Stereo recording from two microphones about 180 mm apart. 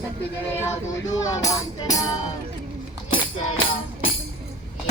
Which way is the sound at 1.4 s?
20° left (ahead or behind).